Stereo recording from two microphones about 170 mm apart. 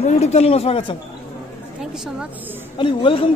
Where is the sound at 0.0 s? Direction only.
40° left (ahead or behind).